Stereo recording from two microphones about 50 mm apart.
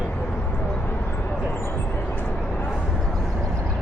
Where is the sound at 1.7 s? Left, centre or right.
Left.